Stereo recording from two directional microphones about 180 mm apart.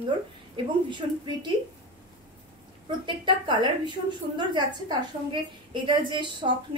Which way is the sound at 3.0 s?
25° right (ahead or behind).